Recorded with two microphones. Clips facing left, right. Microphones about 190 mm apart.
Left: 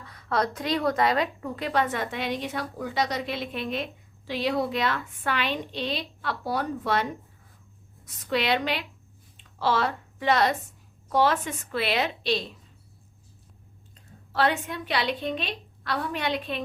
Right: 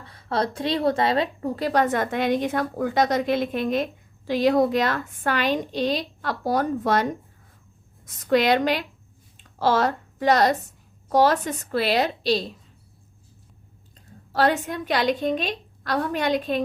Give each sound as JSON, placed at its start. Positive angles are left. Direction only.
{"t": 0.0, "sound": "a woman's voice", "side_deg": -30}
{"t": 14.3, "sound": "speech", "side_deg": -40}